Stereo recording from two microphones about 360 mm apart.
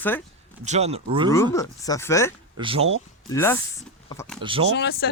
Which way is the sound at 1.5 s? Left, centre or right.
Centre.